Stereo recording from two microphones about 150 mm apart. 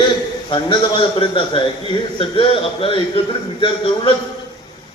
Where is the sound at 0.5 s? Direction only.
35° left (ahead or behind).